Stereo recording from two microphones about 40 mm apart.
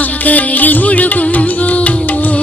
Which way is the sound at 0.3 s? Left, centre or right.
Left.